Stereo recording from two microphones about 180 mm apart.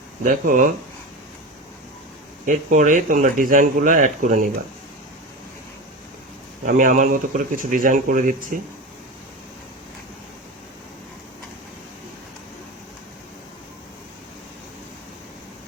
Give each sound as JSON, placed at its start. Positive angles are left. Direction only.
{"t": 0.3, "sound": "speech", "side_deg": -45}
{"t": 2.5, "sound": "speech", "side_deg": -45}
{"t": 6.7, "sound": "speech", "side_deg": -45}